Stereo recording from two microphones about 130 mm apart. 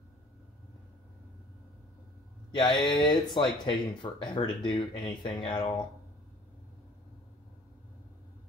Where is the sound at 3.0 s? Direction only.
35° left (ahead or behind).